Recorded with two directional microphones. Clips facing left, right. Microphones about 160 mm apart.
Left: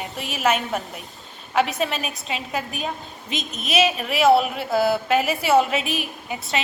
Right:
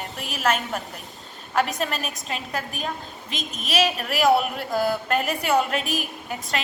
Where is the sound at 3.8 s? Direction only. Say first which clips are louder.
Left 3 dB; centre (ahead or behind).